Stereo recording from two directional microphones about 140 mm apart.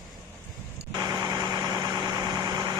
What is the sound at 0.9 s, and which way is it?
Vehicle, 25° right (ahead or behind).